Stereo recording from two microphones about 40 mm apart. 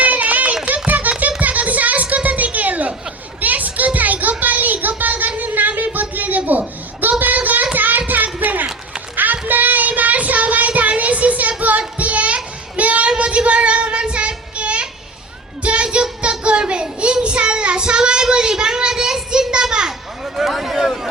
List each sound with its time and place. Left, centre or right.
0.0 s a sound: right
9.5 s child singing: right
19.6 s children playing: centre